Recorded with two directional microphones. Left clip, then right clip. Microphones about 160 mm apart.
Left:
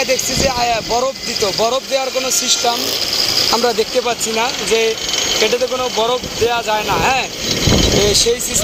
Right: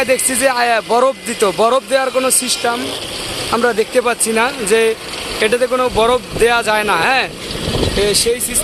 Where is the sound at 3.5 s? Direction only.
20° right (ahead or behind).